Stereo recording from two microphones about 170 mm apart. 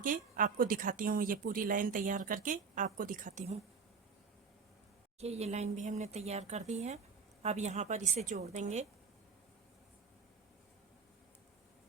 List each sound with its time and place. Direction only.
0.0 s speech: 55° right (ahead or behind)
5.2 s speech: 40° right (ahead or behind)